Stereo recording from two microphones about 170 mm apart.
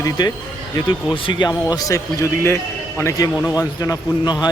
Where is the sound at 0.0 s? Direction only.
25° left (ahead or behind).